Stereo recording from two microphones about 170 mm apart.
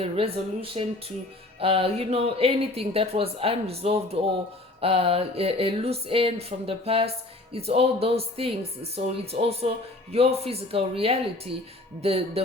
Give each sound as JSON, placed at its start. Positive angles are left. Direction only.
{"t": 0.0, "sound": "speech", "side_deg": -35}